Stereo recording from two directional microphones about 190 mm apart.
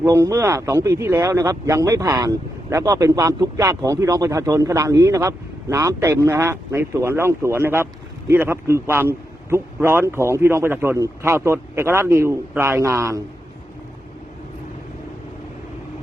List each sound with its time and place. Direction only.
0.0 s speech: 15° right (ahead or behind)